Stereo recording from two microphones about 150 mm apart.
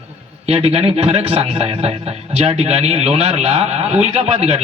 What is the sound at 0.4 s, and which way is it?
A man's voice, 45° right (ahead or behind).